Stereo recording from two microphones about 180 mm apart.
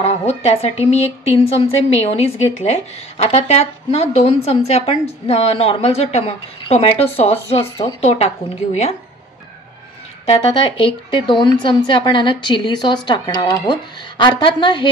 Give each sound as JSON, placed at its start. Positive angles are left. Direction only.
{"t": 0.0, "sound": "a woman's voice", "side_deg": 35}
{"t": 7.6, "sound": "speech", "side_deg": 20}
{"t": 8.0, "sound": "a woman's voice", "side_deg": 35}
{"t": 10.3, "sound": "speech", "side_deg": 30}